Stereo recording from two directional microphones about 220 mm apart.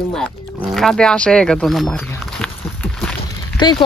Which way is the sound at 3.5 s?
20° left (ahead or behind).